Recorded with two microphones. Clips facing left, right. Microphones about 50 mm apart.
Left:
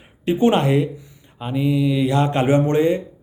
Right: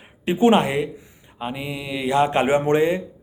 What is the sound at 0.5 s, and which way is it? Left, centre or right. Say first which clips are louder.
Speech: left 1 dB; centre.